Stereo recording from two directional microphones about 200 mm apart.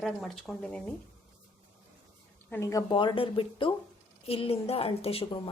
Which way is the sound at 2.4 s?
10° left (ahead or behind).